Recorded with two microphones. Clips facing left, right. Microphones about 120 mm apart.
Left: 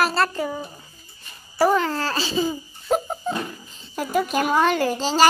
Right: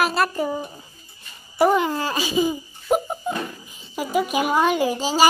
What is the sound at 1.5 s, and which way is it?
Laughter, 15° right (ahead or behind).